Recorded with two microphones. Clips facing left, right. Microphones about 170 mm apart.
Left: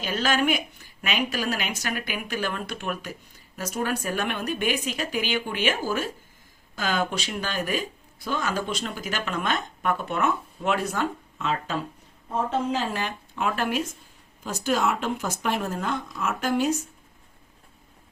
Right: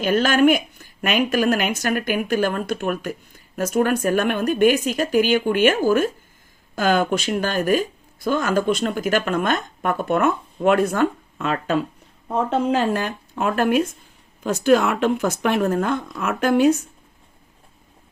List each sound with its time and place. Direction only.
0.0 s speech: 55° right (ahead or behind)
14.4 s speech: 65° right (ahead or behind)